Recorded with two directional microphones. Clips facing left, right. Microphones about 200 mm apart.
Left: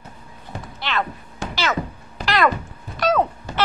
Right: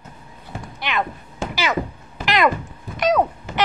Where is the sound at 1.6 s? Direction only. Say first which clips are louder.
Right 1 dB; 10° right (ahead or behind).